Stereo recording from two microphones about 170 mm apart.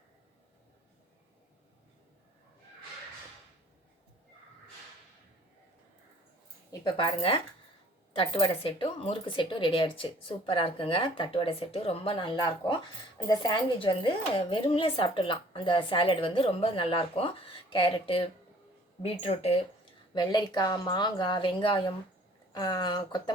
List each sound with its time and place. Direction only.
6.7 s speech: 25° left (ahead or behind)
20.1 s speech: 25° left (ahead or behind)